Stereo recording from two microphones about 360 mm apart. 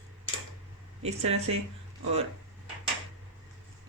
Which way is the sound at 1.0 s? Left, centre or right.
Centre.